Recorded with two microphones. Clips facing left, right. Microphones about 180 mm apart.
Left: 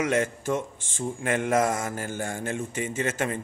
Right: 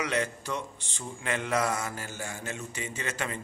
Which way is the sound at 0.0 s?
50° left (ahead or behind).